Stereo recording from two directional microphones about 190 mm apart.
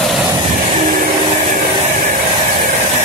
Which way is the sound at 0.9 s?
45° right (ahead or behind).